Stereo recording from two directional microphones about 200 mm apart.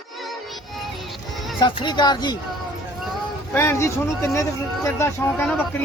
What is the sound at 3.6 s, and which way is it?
Speech, 15° left (ahead or behind).